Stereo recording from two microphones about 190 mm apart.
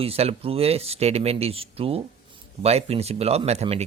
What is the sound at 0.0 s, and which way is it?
Speech, 30° right (ahead or behind).